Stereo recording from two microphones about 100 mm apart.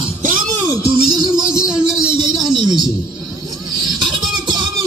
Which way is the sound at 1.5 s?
10° right (ahead or behind).